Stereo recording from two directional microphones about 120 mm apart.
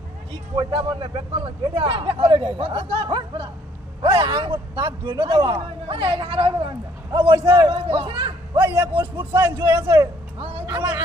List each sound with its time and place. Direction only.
0.6 s a man's voice: 45° right (ahead or behind)
8.9 s speech: 20° right (ahead or behind)